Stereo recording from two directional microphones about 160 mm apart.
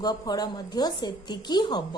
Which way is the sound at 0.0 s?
25° left (ahead or behind).